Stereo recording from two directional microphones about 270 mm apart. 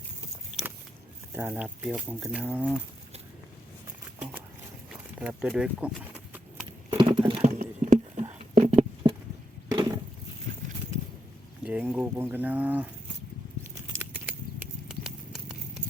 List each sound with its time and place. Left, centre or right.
1.3 s speech: centre
4.2 s a sound: centre
6.9 s patter: centre
8.2 s a sound: centre
11.6 s speech: centre
14.0 s horse: centre